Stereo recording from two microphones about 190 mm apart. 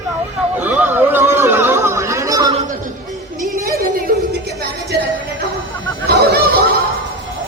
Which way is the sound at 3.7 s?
50° right (ahead or behind).